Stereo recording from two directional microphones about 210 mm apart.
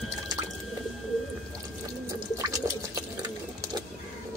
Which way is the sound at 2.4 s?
15° right (ahead or behind).